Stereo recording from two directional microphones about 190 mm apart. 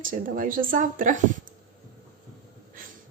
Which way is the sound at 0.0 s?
45° right (ahead or behind).